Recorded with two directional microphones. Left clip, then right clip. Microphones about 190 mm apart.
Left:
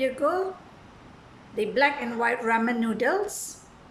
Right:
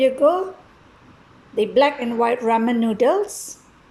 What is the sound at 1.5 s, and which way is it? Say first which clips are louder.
A woman's voice: right 6 dB; 15° right (ahead or behind).